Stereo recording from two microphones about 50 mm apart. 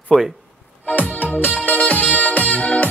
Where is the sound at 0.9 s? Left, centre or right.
Left.